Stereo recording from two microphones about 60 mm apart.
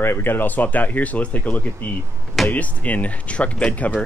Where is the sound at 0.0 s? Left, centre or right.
Left.